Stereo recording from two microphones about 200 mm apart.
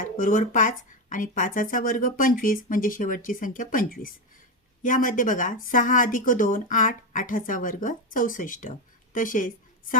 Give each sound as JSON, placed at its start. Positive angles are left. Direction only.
{"t": 0.0, "sound": "a woman's voice", "side_deg": 40}